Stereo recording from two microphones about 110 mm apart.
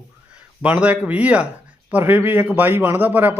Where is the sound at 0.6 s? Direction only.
10° right (ahead or behind).